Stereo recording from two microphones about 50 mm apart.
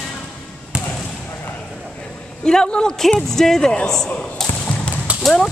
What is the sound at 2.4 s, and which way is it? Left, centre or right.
Speech, centre.